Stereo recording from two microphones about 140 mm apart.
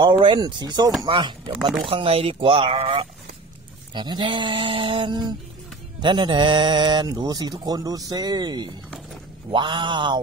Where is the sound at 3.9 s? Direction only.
35° right (ahead or behind).